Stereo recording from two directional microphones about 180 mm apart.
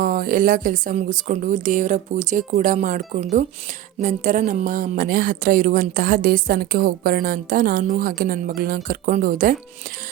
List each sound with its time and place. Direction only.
0.0 s a woman's voice: 50° right (ahead or behind)